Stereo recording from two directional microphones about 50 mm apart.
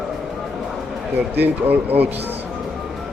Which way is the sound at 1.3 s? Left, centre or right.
Right.